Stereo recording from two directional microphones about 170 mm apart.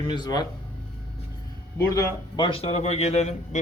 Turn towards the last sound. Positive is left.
turn(degrees=40)  # may be behind; listen again after turning